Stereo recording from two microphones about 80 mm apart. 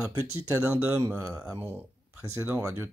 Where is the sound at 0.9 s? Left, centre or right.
Right.